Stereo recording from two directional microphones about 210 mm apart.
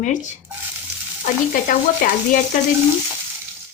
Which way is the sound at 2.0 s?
40° left (ahead or behind).